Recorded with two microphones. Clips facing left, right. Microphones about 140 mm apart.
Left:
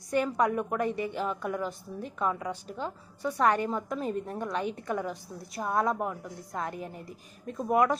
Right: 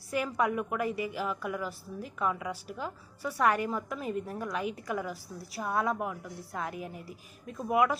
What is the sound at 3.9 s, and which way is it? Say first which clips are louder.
Speech: left 2 dB; 35° left (ahead or behind).